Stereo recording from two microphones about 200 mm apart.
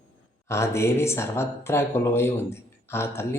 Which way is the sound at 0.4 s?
15° left (ahead or behind).